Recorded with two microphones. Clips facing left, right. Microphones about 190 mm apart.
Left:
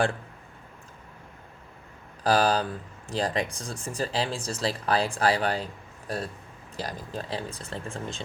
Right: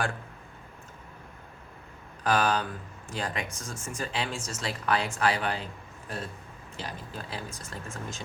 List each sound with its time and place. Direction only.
2.2 s speech: 35° left (ahead or behind)
6.7 s speech: 35° left (ahead or behind)